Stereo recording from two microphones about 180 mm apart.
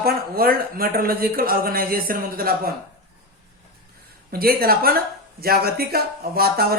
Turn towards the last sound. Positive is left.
turn(degrees=-55)  # may be behind; listen again after turning